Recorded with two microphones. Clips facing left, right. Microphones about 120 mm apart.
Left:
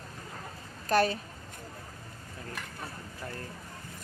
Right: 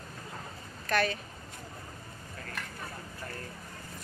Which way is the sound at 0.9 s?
35° left (ahead or behind).